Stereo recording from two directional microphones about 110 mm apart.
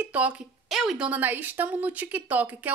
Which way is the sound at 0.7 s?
5° right (ahead or behind).